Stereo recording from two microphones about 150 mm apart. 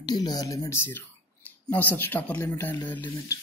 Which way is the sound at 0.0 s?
25° left (ahead or behind).